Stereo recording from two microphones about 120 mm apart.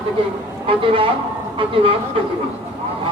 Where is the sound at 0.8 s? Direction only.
50° right (ahead or behind).